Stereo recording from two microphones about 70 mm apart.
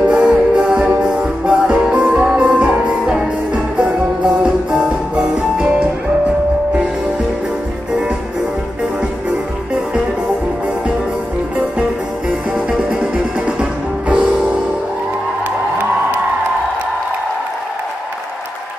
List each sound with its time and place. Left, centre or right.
0.0 s music: centre
12.3 s music: centre